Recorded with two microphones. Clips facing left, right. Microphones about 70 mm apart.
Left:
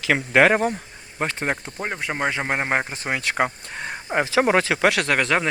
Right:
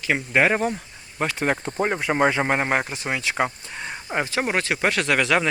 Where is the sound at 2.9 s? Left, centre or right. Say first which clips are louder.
Left 1 dB; left.